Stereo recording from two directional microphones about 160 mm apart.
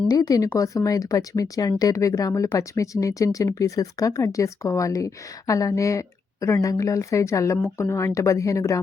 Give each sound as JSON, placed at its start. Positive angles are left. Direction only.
{"t": 0.1, "sound": "speech", "side_deg": 25}